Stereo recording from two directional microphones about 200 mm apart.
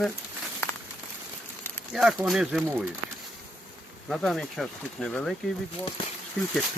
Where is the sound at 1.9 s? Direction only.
Centre (ahead or behind).